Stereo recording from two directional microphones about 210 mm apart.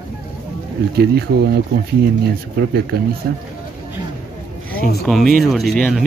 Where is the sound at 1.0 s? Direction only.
50° right (ahead or behind).